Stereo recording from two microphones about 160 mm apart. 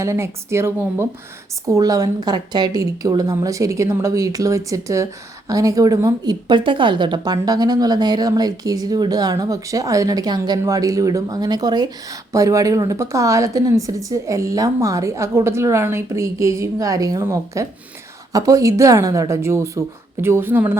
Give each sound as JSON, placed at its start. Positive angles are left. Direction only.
{"t": 0.0, "sound": "speech", "side_deg": -15}